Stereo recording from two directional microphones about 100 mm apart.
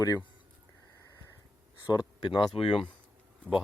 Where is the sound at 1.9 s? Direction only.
45° left (ahead or behind).